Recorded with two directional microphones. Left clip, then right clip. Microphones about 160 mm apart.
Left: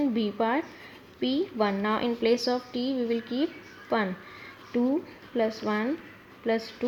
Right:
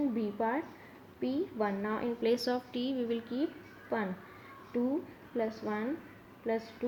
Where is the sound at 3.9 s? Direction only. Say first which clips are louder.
Left 8 dB; 25° left (ahead or behind).